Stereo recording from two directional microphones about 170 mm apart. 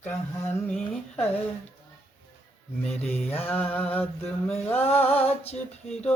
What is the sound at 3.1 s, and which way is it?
Mantra, 40° left (ahead or behind).